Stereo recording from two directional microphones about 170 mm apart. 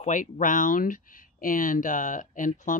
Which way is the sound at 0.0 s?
50° left (ahead or behind).